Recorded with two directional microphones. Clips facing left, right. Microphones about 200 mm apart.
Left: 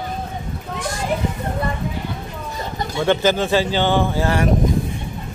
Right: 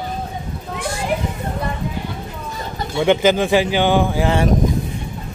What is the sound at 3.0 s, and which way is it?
Speech, 15° right (ahead or behind).